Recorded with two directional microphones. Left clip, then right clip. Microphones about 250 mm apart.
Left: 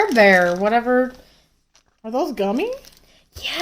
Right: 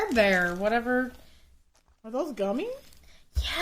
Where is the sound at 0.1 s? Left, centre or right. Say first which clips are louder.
Left 8 dB; right.